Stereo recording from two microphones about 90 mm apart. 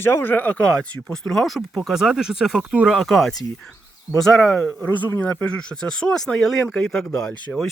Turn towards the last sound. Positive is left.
turn(degrees=5)  # may be behind; listen again after turning